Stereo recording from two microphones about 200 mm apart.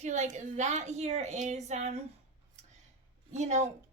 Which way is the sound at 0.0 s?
35° right (ahead or behind).